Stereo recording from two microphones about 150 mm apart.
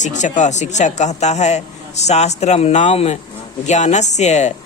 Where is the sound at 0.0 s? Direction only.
55° left (ahead or behind).